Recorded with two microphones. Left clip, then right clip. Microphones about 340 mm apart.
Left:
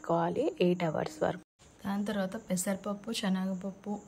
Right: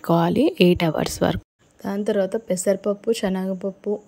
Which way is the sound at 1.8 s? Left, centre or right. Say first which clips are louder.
Right 13 dB; centre.